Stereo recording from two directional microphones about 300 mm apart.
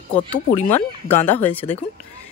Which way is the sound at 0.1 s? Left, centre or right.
Centre.